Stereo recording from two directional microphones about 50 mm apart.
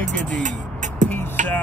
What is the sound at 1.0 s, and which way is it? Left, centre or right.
Music, left.